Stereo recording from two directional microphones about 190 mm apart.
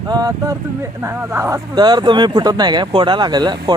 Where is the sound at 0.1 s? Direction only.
20° right (ahead or behind).